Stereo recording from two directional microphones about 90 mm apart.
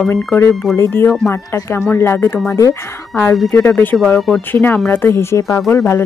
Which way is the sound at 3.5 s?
25° left (ahead or behind).